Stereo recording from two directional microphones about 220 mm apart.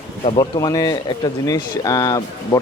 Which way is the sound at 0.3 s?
20° left (ahead or behind).